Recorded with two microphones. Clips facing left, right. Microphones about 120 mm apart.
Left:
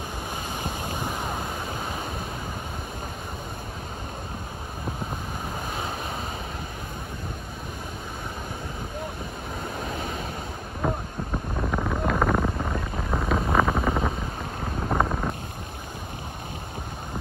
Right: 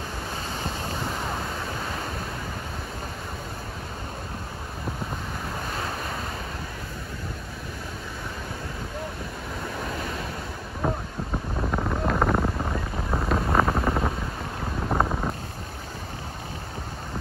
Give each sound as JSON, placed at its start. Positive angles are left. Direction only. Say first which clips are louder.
{"t": 0.7, "sound": "wind noise", "louder": "even", "side_deg": 15}
{"t": 11.6, "sound": "wind noise", "louder": "even", "side_deg": 0}